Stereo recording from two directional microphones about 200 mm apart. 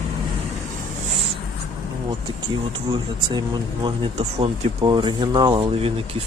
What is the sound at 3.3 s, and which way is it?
Speech, 25° right (ahead or behind).